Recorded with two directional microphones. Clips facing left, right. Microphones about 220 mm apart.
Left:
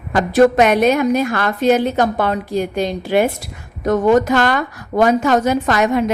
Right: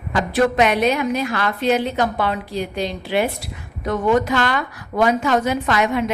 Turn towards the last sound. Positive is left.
turn(degrees=40)  # may be behind; listen again after turning